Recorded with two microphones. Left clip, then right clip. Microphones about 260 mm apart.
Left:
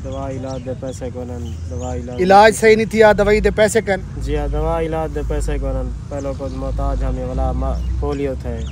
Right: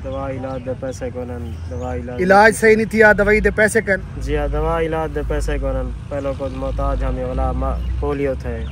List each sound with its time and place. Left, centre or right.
0.1 s speech: centre
2.1 s speech: centre
4.3 s speech: centre